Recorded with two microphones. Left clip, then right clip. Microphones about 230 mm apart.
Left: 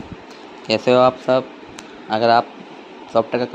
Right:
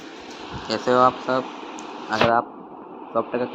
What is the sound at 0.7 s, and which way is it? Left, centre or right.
Speech, left.